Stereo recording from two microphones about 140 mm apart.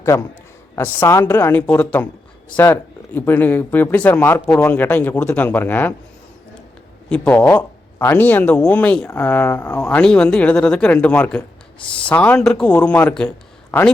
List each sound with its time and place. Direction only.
0.0 s a man's voice: 20° left (ahead or behind)
3.2 s speech: 15° left (ahead or behind)
7.1 s speech: 10° left (ahead or behind)